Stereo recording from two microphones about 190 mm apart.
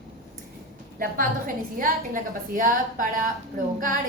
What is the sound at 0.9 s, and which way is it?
A woman's voice, 50° right (ahead or behind).